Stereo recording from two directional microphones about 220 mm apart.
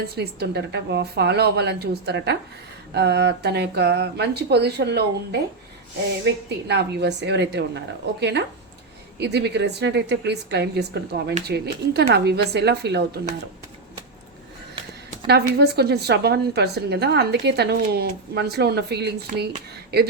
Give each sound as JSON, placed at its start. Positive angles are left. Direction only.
{"t": 0.2, "sound": "a woman's voice", "side_deg": -50}
{"t": 15.3, "sound": "a woman's voice", "side_deg": -45}